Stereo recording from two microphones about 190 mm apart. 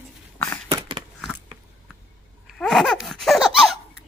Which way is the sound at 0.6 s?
25° right (ahead or behind).